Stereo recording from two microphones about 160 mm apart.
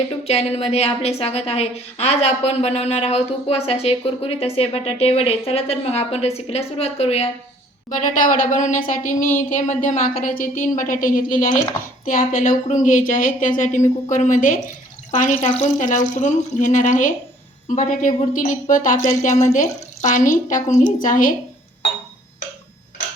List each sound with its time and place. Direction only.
0.3 s a woman's voice: 40° left (ahead or behind)
7.9 s a woman's voice: 55° left (ahead or behind)
15.4 s a woman's voice: 40° left (ahead or behind)
15.8 s a woman's voice: 55° left (ahead or behind)